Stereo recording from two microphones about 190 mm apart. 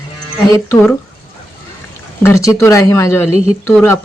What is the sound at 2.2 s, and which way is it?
Speech, 15° left (ahead or behind).